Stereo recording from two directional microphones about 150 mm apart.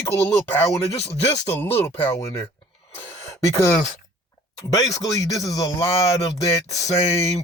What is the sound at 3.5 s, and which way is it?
Speech, 15° left (ahead or behind).